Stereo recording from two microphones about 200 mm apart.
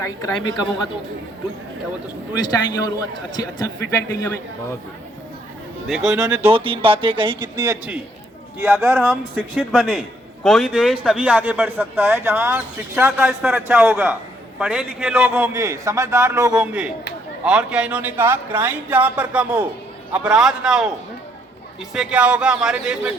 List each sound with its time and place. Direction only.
0.0 s a woman's voice: 15° left (ahead or behind)
2.3 s a man's voice: 20° left (ahead or behind)
5.9 s speech: centre (ahead or behind)
6.5 s a man's voice: 25° right (ahead or behind)
9.6 s speech: centre (ahead or behind)
21.9 s speech: 5° right (ahead or behind)